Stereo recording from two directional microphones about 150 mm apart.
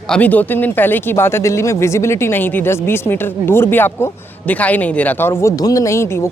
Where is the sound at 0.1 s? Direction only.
10° left (ahead or behind).